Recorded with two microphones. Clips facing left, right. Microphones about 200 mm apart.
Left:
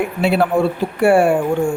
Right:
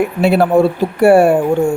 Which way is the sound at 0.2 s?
40° right (ahead or behind).